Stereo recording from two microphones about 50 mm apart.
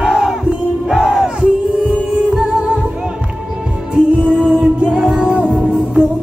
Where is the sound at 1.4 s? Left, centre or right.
Right.